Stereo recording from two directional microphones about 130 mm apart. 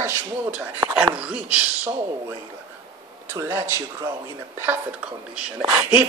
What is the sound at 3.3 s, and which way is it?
Speech, 20° right (ahead or behind).